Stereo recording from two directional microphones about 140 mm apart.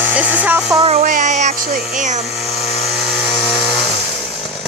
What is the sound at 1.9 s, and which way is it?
Speech, 60° right (ahead or behind).